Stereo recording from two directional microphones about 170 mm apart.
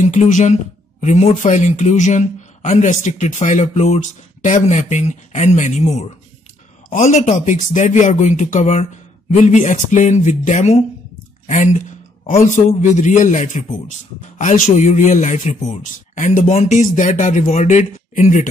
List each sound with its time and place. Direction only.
0.0 s speech: 45° left (ahead or behind)
11.4 s a sound: 45° left (ahead or behind)
12.4 s speech: 45° left (ahead or behind)